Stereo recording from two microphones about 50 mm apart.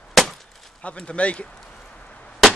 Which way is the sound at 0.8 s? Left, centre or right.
Left.